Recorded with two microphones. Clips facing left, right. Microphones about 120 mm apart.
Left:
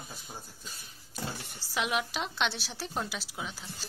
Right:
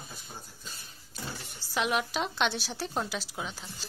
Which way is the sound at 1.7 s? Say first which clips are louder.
Right 2 dB; centre (ahead or behind).